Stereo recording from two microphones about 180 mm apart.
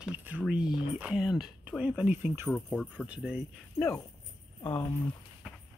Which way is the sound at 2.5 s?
5° left (ahead or behind).